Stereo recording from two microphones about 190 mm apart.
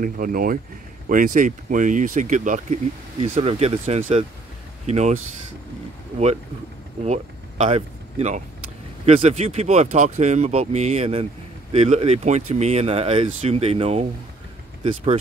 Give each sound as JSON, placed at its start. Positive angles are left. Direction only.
{"t": 0.0, "sound": "speech", "side_deg": -50}
{"t": 7.0, "sound": "speech", "side_deg": -35}